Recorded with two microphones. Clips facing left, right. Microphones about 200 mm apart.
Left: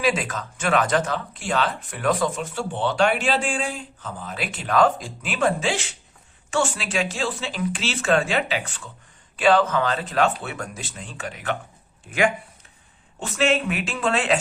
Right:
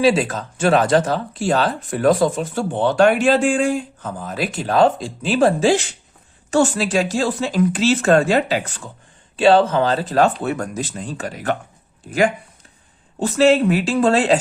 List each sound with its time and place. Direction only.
0.0 s speech: 30° right (ahead or behind)
9.3 s speech: 30° right (ahead or behind)